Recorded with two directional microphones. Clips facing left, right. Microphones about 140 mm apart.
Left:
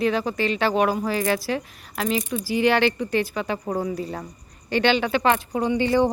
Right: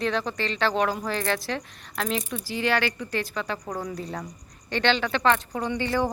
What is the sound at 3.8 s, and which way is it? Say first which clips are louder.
Speech: left 4 dB; 5° left (ahead or behind).